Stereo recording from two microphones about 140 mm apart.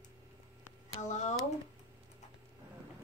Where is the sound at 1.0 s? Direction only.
55° left (ahead or behind).